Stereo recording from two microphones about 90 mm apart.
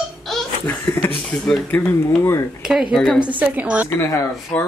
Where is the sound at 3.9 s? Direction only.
30° left (ahead or behind).